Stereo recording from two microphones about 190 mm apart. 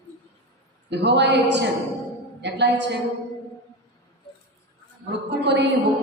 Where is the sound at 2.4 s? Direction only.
65° right (ahead or behind).